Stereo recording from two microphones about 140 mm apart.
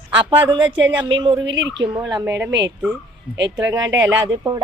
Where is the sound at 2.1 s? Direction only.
25° right (ahead or behind).